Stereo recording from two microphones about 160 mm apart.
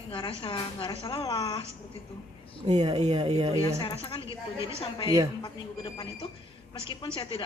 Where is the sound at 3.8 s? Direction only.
35° left (ahead or behind).